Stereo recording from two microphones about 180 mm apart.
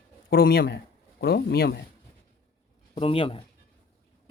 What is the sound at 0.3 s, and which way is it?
Speech, 55° left (ahead or behind).